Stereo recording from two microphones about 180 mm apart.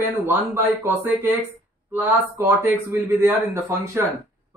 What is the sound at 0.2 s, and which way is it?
Speech, 10° right (ahead or behind).